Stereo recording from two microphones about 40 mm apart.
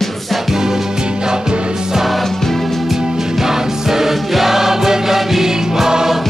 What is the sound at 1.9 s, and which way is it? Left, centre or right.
Music, centre.